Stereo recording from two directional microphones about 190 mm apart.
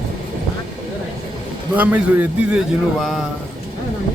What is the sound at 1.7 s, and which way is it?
A man's voice, 10° right (ahead or behind).